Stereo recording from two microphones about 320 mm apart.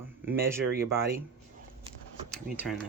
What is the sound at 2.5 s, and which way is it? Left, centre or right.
Speech, centre.